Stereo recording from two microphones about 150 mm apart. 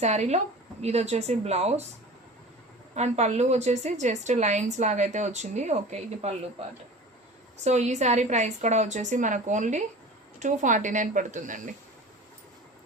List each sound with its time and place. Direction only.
0.0 s a woman's voice: 45° right (ahead or behind)
2.9 s a woman's voice: 50° right (ahead or behind)